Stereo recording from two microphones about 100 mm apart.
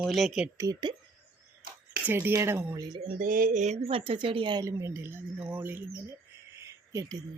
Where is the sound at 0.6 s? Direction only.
35° right (ahead or behind).